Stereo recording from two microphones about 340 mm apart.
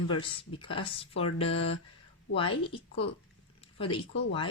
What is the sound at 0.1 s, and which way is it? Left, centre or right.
Speech, centre.